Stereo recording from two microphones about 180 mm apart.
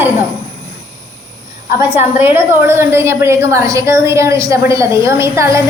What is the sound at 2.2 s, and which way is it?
A woman's voice, 15° right (ahead or behind).